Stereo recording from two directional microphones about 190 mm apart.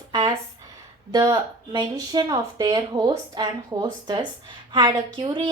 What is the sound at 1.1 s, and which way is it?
A woman's voice, 20° right (ahead or behind).